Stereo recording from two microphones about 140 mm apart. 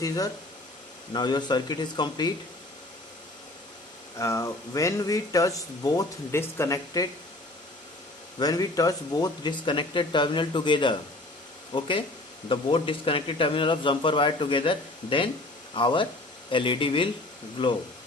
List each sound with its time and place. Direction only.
1.1 s a man's voice: 30° left (ahead or behind)
4.2 s speech: 20° left (ahead or behind)
8.4 s a man's voice: 25° left (ahead or behind)